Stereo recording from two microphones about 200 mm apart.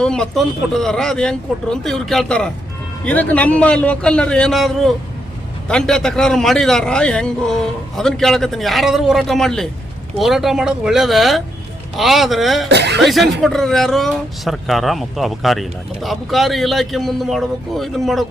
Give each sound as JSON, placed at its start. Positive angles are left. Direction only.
{"t": 0.0, "sound": "speech", "side_deg": 5}
{"t": 12.6, "sound": "speech", "side_deg": -60}
{"t": 13.0, "sound": "speech", "side_deg": 0}